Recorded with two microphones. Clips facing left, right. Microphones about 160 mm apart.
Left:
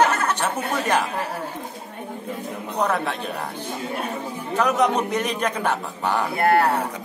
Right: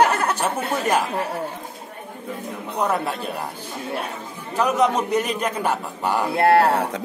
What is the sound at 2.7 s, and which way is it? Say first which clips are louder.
Speech: even; 10° right (ahead or behind).